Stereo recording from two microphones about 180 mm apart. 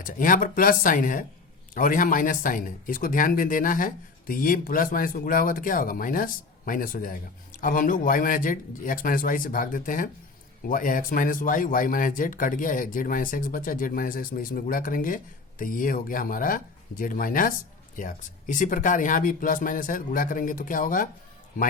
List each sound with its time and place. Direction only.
0.0 s speech: 50° left (ahead or behind)